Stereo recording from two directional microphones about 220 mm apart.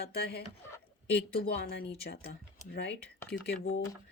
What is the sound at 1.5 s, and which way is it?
A woman's voice, 45° left (ahead or behind).